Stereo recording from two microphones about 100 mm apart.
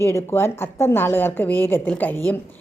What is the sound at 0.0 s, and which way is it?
A woman's voice, 25° left (ahead or behind).